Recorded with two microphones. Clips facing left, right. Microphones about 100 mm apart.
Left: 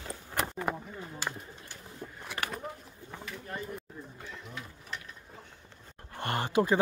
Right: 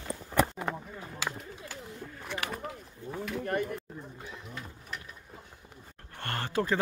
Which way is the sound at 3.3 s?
65° right (ahead or behind).